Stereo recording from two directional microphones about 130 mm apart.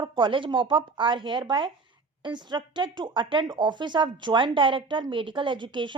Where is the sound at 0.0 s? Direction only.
40° right (ahead or behind).